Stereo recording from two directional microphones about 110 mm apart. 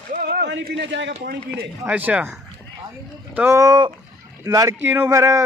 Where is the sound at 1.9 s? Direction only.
15° right (ahead or behind).